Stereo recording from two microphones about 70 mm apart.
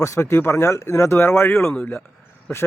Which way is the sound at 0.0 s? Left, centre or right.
Left.